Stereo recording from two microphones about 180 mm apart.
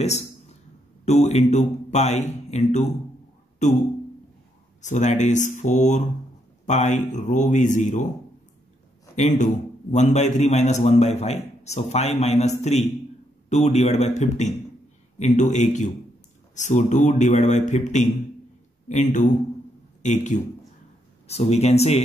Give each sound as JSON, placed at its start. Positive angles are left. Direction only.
{"t": 0.0, "sound": "a sound", "side_deg": 35}
{"t": 1.0, "sound": "a man's voice", "side_deg": 40}
{"t": 4.8, "sound": "a man's voice", "side_deg": 40}
{"t": 9.1, "sound": "a man's voice", "side_deg": 40}